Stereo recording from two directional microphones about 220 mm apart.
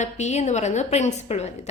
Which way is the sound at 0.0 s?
30° left (ahead or behind).